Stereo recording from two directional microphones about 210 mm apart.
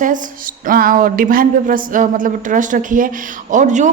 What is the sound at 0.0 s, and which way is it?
Speech, 40° right (ahead or behind).